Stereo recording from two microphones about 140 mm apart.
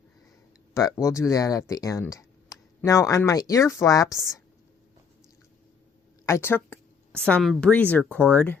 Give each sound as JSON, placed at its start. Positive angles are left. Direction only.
{"t": 0.7, "sound": "speech", "side_deg": 25}
{"t": 6.2, "sound": "a woman's voice", "side_deg": 20}